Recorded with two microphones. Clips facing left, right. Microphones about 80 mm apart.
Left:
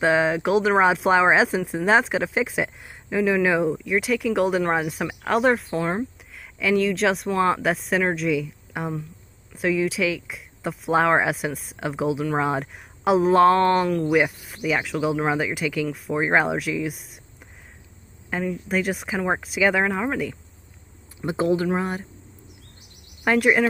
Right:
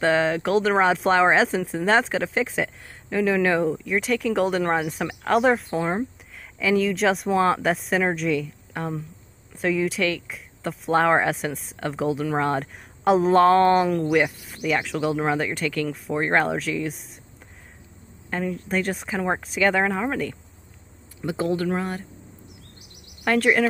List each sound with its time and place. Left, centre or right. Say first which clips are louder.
0.0 s speech: left 1 dB; centre
14.1 s speech: left 1 dB; centre
18.3 s speech: left 1 dB; centre
21.2 s speech: left 3 dB; left
23.2 s speech: left 1 dB; centre